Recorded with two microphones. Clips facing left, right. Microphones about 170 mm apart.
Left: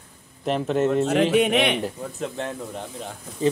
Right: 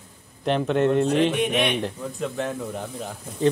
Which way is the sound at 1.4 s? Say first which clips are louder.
Left 2 dB; 60° left (ahead or behind).